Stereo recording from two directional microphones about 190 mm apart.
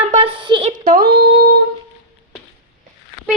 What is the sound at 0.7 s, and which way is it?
Speech, 45° right (ahead or behind).